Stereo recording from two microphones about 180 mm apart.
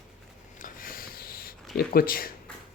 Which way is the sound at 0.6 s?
50° left (ahead or behind).